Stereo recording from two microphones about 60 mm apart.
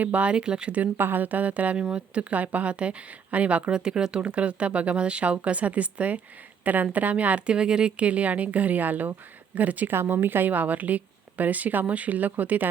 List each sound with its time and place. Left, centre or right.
0.0 s a woman's voice: right
0.9 s a woman's voice: right